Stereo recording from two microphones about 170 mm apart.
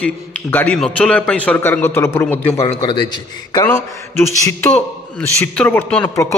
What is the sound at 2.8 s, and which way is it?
A man's voice, 25° left (ahead or behind).